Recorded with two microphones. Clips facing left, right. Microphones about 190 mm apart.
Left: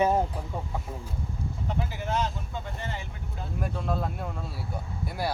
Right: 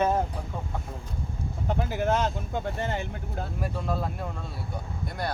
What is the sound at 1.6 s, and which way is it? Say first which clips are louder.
Speech: right 7 dB; 50° right (ahead or behind).